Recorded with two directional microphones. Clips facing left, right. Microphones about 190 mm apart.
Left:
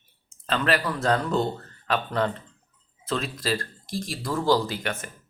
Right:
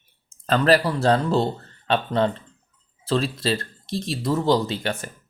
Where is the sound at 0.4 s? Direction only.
40° right (ahead or behind).